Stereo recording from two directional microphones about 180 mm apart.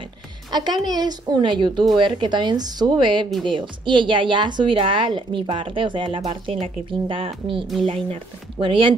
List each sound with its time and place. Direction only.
0.5 s a woman's voice: 25° right (ahead or behind)